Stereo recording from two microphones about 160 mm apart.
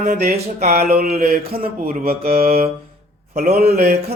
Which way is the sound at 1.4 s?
40° right (ahead or behind).